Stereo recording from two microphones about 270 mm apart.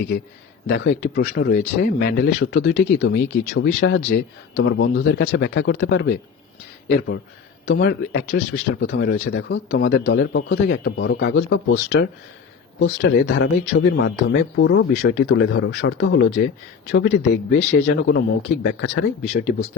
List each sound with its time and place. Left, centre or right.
0.7 s speech: left
7.6 s a man's voice: left